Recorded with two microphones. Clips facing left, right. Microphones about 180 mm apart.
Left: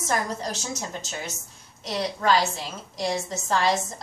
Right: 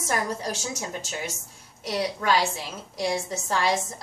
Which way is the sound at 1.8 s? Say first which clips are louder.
Even; 10° right (ahead or behind).